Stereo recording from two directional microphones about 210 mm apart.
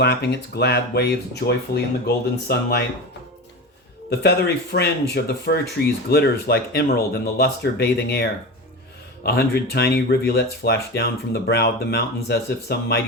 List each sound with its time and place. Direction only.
0.0 s speech: 55° left (ahead or behind)
4.1 s speech: 50° left (ahead or behind)